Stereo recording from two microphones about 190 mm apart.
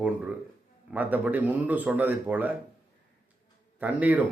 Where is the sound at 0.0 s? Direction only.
5° right (ahead or behind).